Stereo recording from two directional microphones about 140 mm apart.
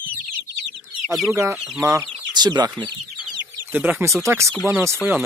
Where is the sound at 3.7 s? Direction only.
15° right (ahead or behind).